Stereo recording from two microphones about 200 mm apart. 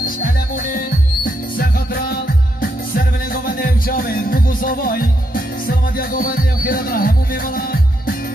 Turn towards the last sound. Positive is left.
turn(degrees=50)  # may be behind; listen again after turning